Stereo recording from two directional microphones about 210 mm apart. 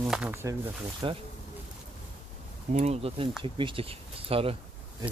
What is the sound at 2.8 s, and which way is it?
Speech, 30° right (ahead or behind).